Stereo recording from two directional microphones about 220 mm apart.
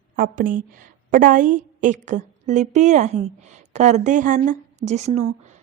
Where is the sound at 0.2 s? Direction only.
40° right (ahead or behind).